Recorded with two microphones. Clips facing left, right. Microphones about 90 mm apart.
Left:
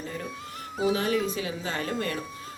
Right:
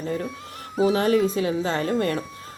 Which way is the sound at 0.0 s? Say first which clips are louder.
Right 7 dB; 40° right (ahead or behind).